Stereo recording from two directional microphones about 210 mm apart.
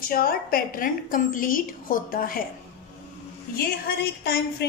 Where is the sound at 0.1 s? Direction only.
45° left (ahead or behind).